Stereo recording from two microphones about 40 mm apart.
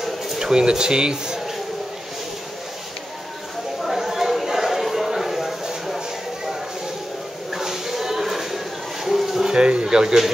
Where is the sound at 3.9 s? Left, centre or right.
Centre.